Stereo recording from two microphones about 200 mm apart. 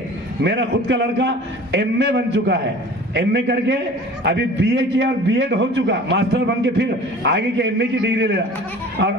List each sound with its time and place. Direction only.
0.4 s a man's voice: 60° right (ahead or behind)